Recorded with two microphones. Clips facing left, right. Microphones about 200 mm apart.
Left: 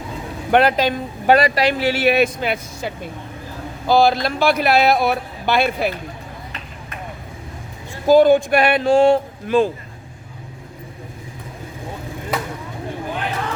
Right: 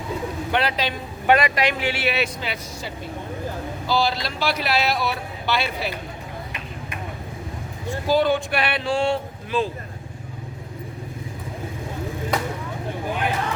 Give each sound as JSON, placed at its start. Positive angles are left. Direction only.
{"t": 0.5, "sound": "a man's voice", "side_deg": 50}
{"t": 8.0, "sound": "a man's voice", "side_deg": 50}